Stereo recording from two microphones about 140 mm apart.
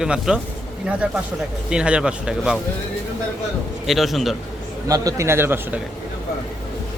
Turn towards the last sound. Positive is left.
turn(degrees=-15)  # may be behind; listen again after turning